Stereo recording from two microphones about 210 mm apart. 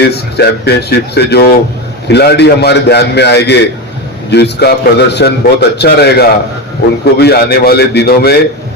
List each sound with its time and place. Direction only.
0.1 s a man's voice: 50° left (ahead or behind)